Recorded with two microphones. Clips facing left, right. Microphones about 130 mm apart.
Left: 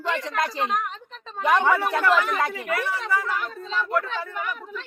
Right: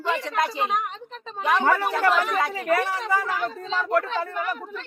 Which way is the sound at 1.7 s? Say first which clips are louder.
Even; 5° left (ahead or behind).